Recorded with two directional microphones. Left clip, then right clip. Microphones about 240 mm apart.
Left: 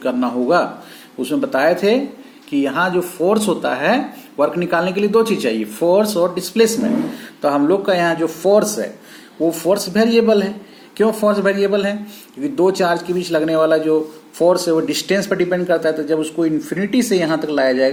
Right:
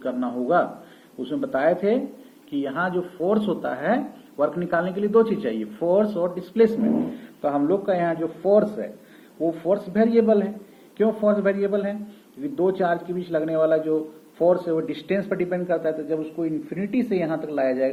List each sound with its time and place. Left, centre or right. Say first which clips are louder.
0.0 s speech: left 8 dB; left